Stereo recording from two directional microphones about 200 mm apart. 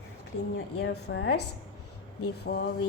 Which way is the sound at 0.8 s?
55° left (ahead or behind).